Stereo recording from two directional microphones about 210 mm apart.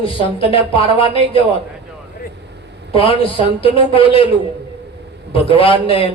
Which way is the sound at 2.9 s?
25° left (ahead or behind).